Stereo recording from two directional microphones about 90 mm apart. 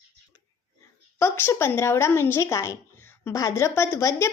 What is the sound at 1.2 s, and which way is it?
A woman's voice, 30° left (ahead or behind).